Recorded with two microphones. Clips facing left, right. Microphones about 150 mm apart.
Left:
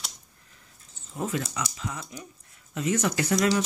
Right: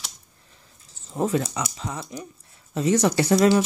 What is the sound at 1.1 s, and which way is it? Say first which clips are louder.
Speech: right 7 dB; 35° right (ahead or behind).